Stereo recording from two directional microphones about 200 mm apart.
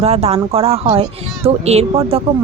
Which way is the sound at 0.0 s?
30° right (ahead or behind).